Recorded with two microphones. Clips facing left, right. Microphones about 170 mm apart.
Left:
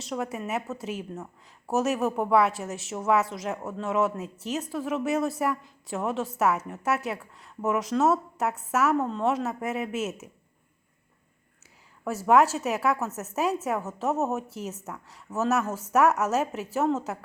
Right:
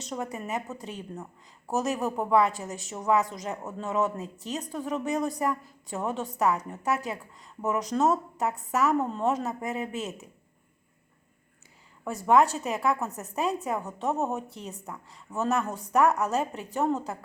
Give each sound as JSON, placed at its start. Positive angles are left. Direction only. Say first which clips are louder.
{"t": 0.0, "sound": "a woman's voice", "louder": "left 2 dB", "side_deg": 0}
{"t": 12.2, "sound": "a woman's voice", "louder": "left 1 dB", "side_deg": 5}